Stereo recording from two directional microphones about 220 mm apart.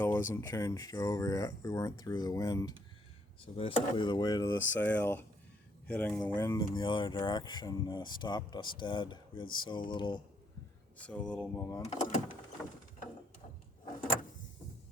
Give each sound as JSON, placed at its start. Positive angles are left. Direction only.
{"t": 0.0, "sound": "speech", "side_deg": 10}
{"t": 11.0, "sound": "speech", "side_deg": 5}
{"t": 11.8, "sound": "speech", "side_deg": 35}